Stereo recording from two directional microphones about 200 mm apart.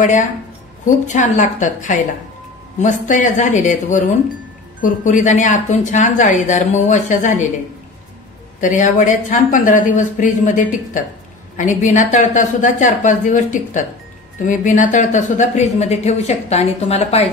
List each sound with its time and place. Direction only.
0.8 s speech: 40° left (ahead or behind)
8.5 s speech: 40° left (ahead or behind)